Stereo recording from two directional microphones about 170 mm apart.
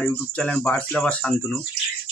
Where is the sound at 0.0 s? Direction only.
5° left (ahead or behind).